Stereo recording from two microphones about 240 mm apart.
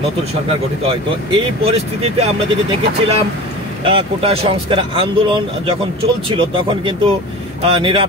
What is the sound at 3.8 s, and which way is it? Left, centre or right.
Speech, right.